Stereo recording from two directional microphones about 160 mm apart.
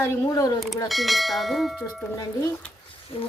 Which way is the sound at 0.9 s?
Centre (ahead or behind).